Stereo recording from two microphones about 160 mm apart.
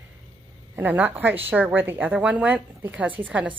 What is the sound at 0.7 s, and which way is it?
Speech, 10° right (ahead or behind).